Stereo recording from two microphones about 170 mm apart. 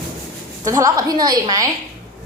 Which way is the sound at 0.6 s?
20° right (ahead or behind).